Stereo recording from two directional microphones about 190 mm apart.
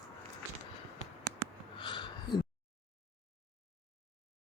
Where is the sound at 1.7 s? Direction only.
25° left (ahead or behind).